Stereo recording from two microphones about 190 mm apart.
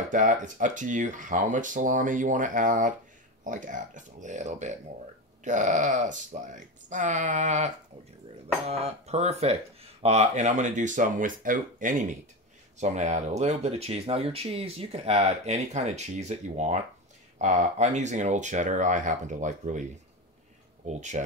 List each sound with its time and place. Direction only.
0.1 s speech: 40° right (ahead or behind)
20.8 s speech: 40° right (ahead or behind)